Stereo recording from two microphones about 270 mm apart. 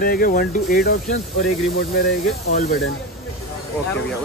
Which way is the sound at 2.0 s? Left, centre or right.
Left.